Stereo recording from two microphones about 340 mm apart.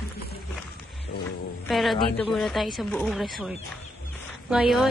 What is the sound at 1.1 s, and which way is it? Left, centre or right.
Music, left.